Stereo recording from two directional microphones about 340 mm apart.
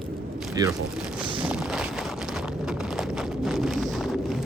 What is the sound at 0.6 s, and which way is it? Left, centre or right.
Speech, centre.